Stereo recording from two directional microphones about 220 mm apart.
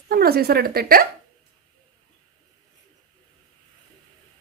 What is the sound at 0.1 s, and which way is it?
Speech, 45° right (ahead or behind).